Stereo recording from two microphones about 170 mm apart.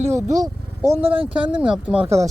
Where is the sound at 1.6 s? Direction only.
5° right (ahead or behind).